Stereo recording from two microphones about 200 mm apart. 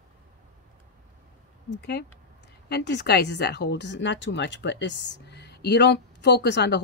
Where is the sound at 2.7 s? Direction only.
60° left (ahead or behind).